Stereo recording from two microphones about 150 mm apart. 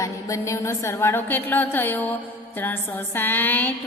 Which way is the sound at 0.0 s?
20° left (ahead or behind).